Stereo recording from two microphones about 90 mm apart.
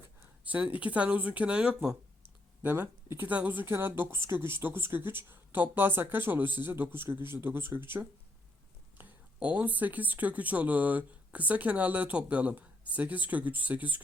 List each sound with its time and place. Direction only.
0.4 s speech: 15° right (ahead or behind)
2.6 s speech: 25° right (ahead or behind)